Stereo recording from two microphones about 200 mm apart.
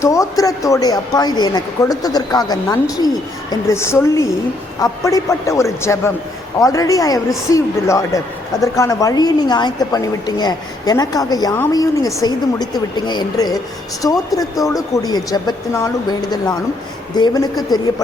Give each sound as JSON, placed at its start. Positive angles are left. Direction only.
{"t": 0.0, "sound": "a woman's voice", "side_deg": 15}
{"t": 17.2, "sound": "a woman's voice", "side_deg": 20}